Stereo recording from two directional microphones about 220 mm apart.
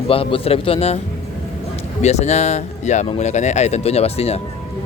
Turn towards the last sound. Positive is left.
turn(degrees=30)  # may be behind; listen again after turning